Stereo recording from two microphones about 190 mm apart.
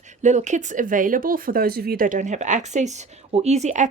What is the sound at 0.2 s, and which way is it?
A woman's voice, 40° right (ahead or behind).